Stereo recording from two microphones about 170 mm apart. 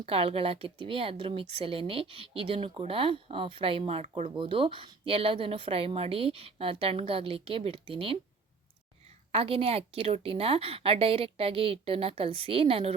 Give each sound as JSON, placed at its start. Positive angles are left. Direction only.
{"t": 0.0, "sound": "speech", "side_deg": -35}
{"t": 9.3, "sound": "speech", "side_deg": -35}